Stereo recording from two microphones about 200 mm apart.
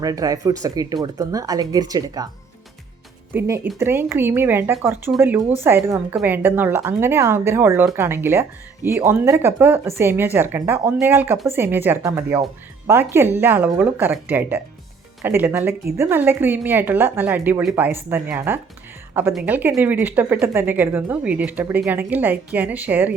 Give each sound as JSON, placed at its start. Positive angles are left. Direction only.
{"t": 0.0, "sound": "speech", "side_deg": -20}
{"t": 3.3, "sound": "speech", "side_deg": -10}